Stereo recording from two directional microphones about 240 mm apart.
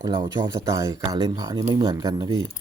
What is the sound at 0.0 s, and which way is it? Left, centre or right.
A man's voice, centre.